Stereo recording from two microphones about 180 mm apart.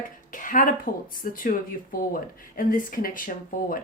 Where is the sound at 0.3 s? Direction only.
50° left (ahead or behind).